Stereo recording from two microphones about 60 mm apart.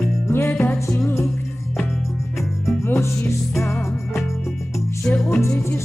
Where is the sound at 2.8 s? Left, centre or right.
Left.